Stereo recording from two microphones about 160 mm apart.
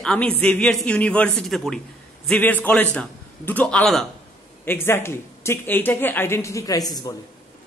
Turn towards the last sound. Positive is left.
turn(degrees=25)  # may be behind; listen again after turning